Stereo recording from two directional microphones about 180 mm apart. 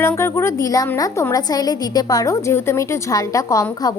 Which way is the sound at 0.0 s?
15° left (ahead or behind).